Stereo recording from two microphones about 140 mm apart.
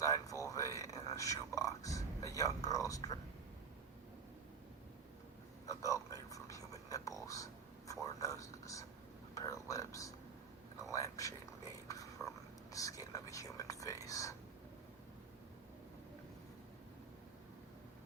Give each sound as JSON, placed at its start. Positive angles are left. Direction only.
{"t": 0.0, "sound": "whispering", "side_deg": 25}
{"t": 5.6, "sound": "whispering", "side_deg": 20}
{"t": 8.0, "sound": "a sound", "side_deg": 20}
{"t": 9.3, "sound": "whispering", "side_deg": 25}
{"t": 11.9, "sound": "a sound", "side_deg": 25}
{"t": 12.7, "sound": "whispering", "side_deg": 25}